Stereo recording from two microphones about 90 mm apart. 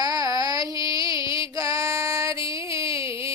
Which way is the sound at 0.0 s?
45° right (ahead or behind).